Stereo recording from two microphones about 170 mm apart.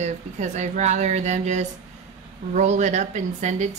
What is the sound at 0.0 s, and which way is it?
Speech, 40° right (ahead or behind).